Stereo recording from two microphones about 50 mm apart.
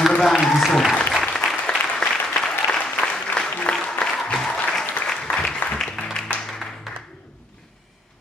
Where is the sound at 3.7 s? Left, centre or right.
Centre.